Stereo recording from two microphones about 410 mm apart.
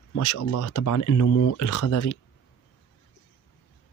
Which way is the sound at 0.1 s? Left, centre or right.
Left.